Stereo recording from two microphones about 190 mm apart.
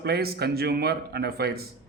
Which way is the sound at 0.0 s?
55° right (ahead or behind).